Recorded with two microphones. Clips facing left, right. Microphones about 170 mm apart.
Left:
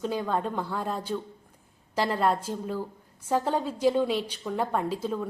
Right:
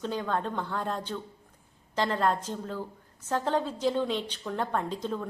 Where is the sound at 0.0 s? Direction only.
10° left (ahead or behind).